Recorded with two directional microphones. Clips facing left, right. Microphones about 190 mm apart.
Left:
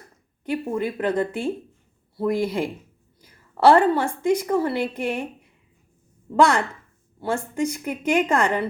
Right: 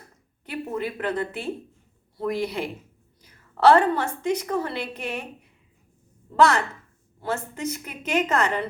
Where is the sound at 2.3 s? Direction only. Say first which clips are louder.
Left 4 dB; 50° left (ahead or behind).